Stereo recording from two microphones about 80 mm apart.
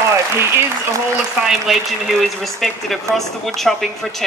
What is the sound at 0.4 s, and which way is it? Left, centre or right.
Speech, right.